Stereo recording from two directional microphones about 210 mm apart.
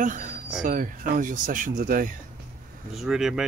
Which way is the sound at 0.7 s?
40° right (ahead or behind).